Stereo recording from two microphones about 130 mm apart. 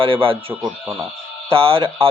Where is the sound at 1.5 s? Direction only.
45° right (ahead or behind).